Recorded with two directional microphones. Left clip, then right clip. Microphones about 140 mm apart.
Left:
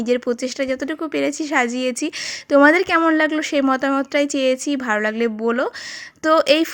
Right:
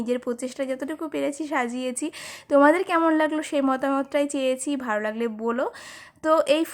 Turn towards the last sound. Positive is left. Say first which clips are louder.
# left 5 dB
turn(degrees=20)  # may be behind; listen again after turning